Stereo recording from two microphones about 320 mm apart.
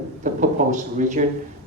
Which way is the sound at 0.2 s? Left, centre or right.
Right.